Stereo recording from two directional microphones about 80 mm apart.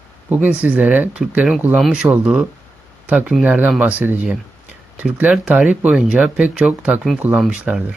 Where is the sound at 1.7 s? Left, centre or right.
Centre.